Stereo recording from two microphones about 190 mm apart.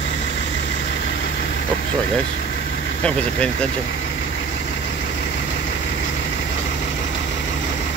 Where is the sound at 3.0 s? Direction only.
5° left (ahead or behind).